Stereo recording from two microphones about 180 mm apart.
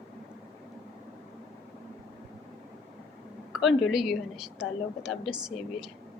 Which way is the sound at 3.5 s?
Centre (ahead or behind).